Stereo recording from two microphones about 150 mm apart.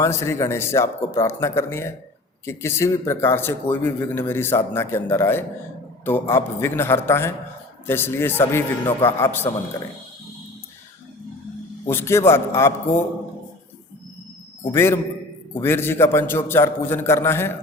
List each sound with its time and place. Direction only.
0.0 s a man's voice: 20° left (ahead or behind)
11.9 s a man's voice: 15° left (ahead or behind)
14.6 s a man's voice: 15° left (ahead or behind)